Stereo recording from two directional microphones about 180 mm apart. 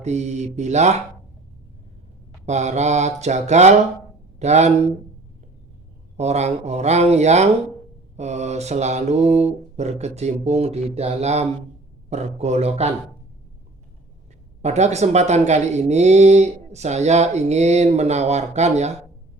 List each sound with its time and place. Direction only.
0.0 s speech: 40° right (ahead or behind)
2.5 s speech: 40° right (ahead or behind)
6.1 s speech: 35° right (ahead or behind)
14.6 s speech: 40° right (ahead or behind)